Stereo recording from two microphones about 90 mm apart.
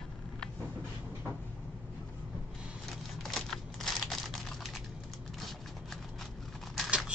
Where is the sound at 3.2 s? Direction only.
5° left (ahead or behind).